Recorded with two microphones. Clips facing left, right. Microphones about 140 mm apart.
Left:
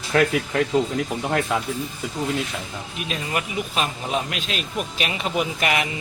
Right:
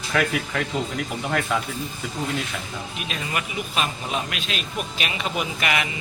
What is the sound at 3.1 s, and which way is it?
Speech, 35° left (ahead or behind).